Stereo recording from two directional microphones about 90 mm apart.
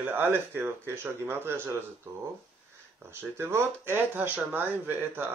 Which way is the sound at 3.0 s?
25° right (ahead or behind).